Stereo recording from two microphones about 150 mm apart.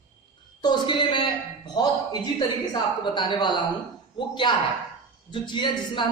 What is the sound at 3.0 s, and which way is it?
Speech, 30° left (ahead or behind).